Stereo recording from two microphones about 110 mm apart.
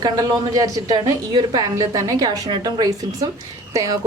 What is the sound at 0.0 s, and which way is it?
A woman's voice, 35° right (ahead or behind).